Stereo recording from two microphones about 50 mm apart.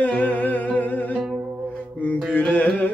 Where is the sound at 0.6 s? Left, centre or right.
Left.